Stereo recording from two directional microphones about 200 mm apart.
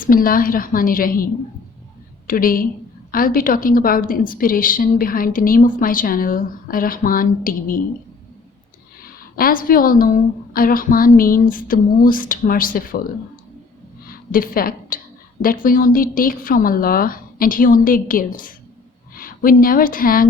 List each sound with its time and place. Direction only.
0.0 s a woman's voice: 45° left (ahead or behind)
9.3 s a woman's voice: 45° left (ahead or behind)
14.1 s a woman's voice: 45° left (ahead or behind)